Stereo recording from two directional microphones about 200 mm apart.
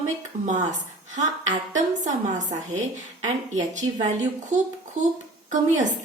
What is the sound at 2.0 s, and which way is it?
Speech, 40° right (ahead or behind).